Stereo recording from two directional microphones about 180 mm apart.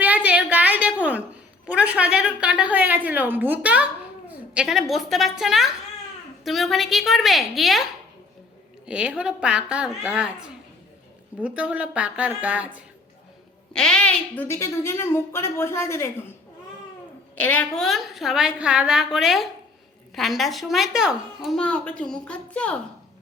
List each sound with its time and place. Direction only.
0.0 s a sound: 10° right (ahead or behind)
4.3 s a woman's voice: 5° right (ahead or behind)
8.9 s a woman's voice: 5° right (ahead or behind)
11.3 s a woman's voice: 5° right (ahead or behind)
13.7 s a woman's voice: 5° left (ahead or behind)
17.4 s a woman's voice: 10° left (ahead or behind)